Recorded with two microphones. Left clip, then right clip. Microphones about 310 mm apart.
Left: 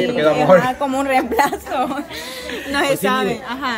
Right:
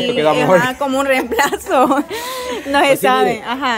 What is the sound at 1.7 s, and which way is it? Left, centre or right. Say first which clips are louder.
Speech: right 8 dB; centre.